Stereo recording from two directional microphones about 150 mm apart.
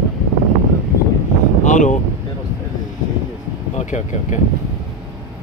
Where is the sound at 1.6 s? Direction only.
55° left (ahead or behind).